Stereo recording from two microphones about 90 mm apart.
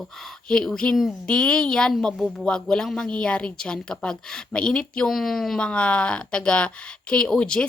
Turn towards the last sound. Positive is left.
turn(degrees=10)  # may be behind; listen again after turning